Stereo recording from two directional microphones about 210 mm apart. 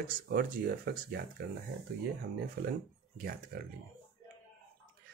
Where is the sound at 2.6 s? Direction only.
45° right (ahead or behind).